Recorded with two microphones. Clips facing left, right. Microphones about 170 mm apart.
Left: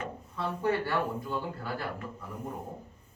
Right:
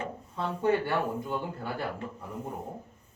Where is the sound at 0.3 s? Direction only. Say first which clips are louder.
Right 3 dB; 20° right (ahead or behind).